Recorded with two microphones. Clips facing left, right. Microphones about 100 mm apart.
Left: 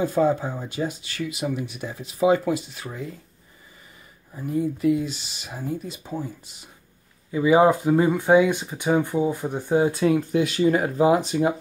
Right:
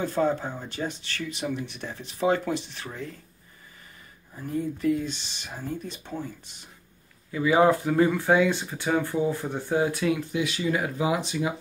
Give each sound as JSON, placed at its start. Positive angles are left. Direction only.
{"t": 0.0, "sound": "speech", "side_deg": 10}
{"t": 4.4, "sound": "speech", "side_deg": 10}
{"t": 7.2, "sound": "speech", "side_deg": 20}
{"t": 10.0, "sound": "speech", "side_deg": 40}